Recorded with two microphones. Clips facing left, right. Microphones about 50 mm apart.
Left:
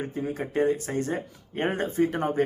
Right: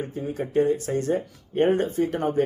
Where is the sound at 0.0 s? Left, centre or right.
Left.